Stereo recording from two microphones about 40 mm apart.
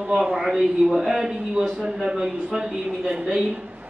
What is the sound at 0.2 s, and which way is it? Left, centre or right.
A man's voice, centre.